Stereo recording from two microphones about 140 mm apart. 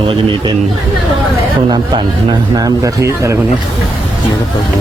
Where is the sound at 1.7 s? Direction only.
30° right (ahead or behind).